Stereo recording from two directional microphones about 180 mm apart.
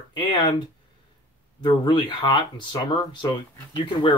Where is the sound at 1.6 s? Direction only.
25° left (ahead or behind).